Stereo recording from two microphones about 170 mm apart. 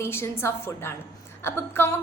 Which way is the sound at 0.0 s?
15° left (ahead or behind).